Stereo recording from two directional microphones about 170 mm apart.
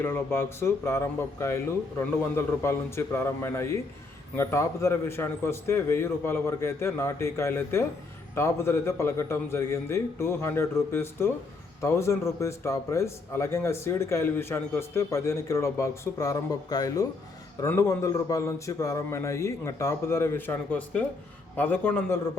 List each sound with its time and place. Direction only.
0.0 s a man's voice: 15° left (ahead or behind)